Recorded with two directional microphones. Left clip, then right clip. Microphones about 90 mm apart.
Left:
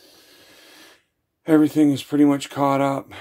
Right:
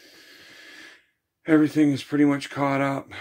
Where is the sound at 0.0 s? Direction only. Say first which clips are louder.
Right 2 dB; 25° left (ahead or behind).